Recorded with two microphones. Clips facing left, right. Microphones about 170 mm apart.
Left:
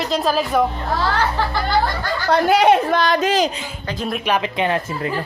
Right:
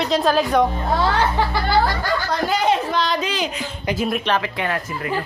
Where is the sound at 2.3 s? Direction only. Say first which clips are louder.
Left 7 dB; 65° left (ahead or behind); by 3.5 s 45° left (ahead or behind).